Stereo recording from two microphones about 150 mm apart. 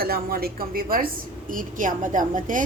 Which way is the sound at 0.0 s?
85° right.